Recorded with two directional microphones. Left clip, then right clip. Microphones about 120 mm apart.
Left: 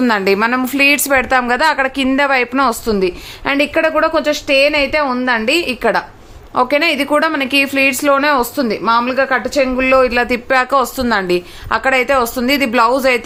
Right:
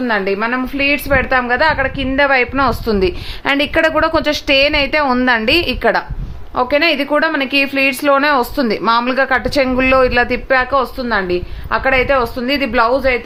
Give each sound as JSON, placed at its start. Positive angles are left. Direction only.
{"t": 0.0, "sound": "a woman's voice", "side_deg": 60}
{"t": 2.8, "sound": "a woman's voice", "side_deg": 0}
{"t": 5.8, "sound": "a woman's voice", "side_deg": 15}
{"t": 10.5, "sound": "a woman's voice", "side_deg": 35}